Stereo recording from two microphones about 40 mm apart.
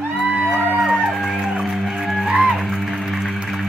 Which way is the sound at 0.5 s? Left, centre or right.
Centre.